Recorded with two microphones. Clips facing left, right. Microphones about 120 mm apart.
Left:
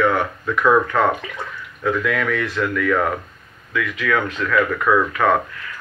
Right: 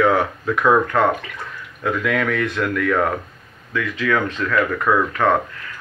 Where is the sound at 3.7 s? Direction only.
35° right (ahead or behind).